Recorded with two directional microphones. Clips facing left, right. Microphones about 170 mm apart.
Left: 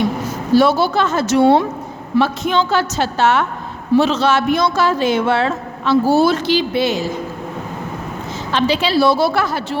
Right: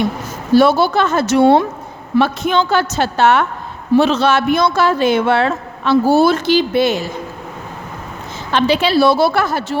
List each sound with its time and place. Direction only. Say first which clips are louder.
0.5 s a man's voice: right 2 dB; 60° right (ahead or behind)
8.5 s a man's voice: right 2 dB; 60° right (ahead or behind)